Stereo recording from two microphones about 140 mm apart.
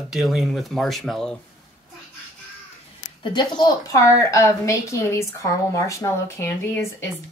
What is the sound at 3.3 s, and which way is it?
A woman's voice, 30° left (ahead or behind).